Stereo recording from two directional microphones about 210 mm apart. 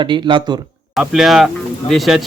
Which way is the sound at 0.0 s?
25° right (ahead or behind).